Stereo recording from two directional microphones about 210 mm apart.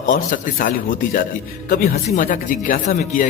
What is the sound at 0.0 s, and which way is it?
A man's voice, 40° left (ahead or behind).